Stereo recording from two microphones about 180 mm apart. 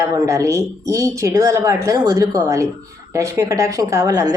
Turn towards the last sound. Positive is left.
turn(degrees=-20)  # may be behind; listen again after turning